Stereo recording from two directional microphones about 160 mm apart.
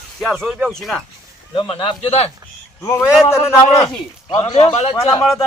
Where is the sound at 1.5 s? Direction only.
30° left (ahead or behind).